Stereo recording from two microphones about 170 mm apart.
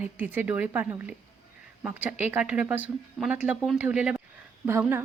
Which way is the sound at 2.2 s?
10° right (ahead or behind).